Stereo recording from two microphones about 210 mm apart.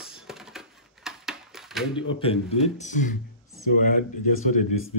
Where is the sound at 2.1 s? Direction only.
25° left (ahead or behind).